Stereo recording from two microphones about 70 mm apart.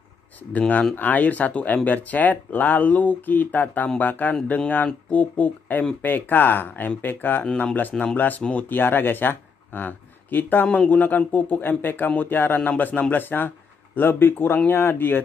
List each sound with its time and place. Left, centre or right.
0.5 s speech: left
7.9 s speech: centre
8.2 s speech: left